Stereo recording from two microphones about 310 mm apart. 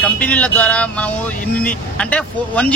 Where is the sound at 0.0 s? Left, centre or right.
Centre.